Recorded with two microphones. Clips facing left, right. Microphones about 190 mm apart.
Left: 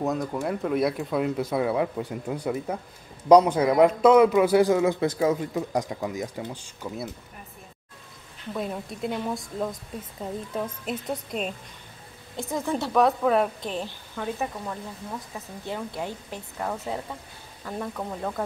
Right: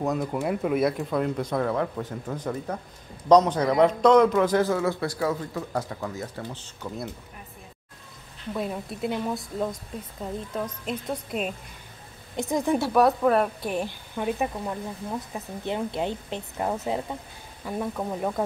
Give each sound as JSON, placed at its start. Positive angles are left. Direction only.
{"t": 0.0, "sound": "a man's voice", "side_deg": 0}
{"t": 8.5, "sound": "speech", "side_deg": 0}
{"t": 12.4, "sound": "a woman's voice", "side_deg": -15}
{"t": 13.7, "sound": "a woman's voice", "side_deg": -15}